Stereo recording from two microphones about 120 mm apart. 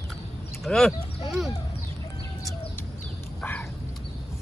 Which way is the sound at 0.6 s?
5° left (ahead or behind).